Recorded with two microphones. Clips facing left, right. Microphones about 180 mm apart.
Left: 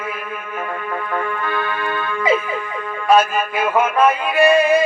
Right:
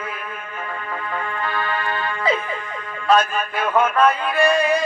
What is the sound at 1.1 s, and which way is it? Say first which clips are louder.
Music: left 3 dB; 55° left (ahead or behind).